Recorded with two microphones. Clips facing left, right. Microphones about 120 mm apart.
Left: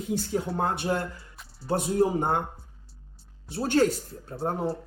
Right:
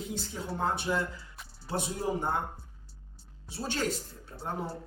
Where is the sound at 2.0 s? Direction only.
65° left (ahead or behind).